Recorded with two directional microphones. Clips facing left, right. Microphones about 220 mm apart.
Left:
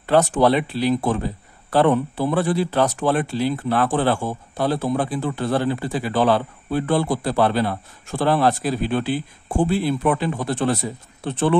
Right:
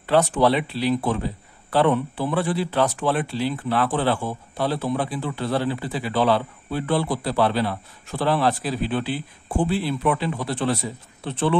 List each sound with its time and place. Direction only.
0.0 s speech: 45° left (ahead or behind)